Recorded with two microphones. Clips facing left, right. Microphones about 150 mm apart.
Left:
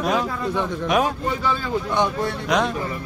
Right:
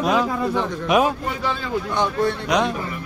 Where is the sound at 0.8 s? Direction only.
10° right (ahead or behind).